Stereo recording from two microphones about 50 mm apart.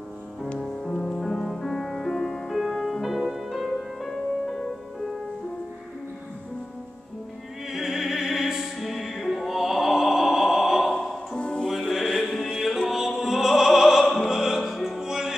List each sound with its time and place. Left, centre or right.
0.6 s music: centre
7.7 s music: centre
11.3 s music: left
11.9 s music: centre
12.6 s opera: centre